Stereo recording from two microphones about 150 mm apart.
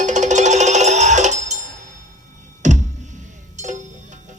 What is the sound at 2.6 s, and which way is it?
Music, 50° right (ahead or behind).